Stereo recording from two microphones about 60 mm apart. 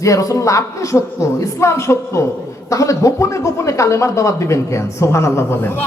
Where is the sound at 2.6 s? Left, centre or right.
Left.